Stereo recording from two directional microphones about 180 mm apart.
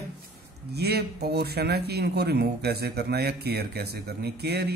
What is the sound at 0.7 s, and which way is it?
Speech, 60° right (ahead or behind).